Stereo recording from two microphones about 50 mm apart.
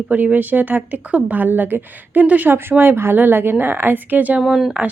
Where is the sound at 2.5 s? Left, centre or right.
Right.